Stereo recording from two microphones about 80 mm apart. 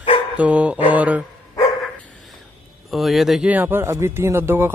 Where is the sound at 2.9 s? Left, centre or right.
Centre.